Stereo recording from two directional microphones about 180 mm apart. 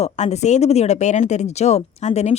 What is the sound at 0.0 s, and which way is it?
Speech, 40° left (ahead or behind).